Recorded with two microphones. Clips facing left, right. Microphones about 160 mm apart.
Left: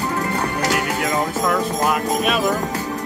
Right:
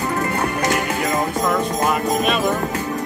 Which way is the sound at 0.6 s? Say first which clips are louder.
Right 1 dB; 10° left (ahead or behind).